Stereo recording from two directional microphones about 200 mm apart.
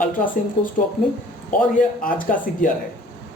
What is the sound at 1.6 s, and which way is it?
Speech, 45° left (ahead or behind).